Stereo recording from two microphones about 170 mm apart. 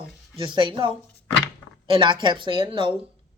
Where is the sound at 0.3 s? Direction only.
25° right (ahead or behind).